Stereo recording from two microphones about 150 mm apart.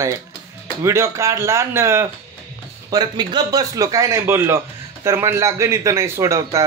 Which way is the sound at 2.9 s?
30° right (ahead or behind).